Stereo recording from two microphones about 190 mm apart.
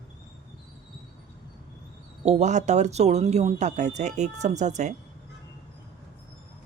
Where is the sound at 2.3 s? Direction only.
35° right (ahead or behind).